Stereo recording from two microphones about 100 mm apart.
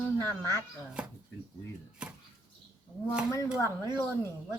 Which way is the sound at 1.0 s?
10° right (ahead or behind).